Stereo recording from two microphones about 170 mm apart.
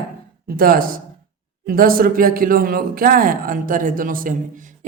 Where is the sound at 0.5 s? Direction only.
60° right (ahead or behind).